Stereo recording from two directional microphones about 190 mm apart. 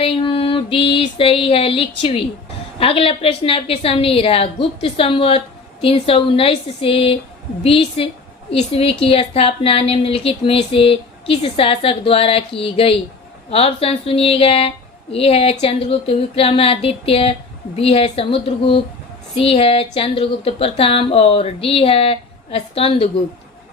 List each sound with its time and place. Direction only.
0.0 s a woman's voice: 30° left (ahead or behind)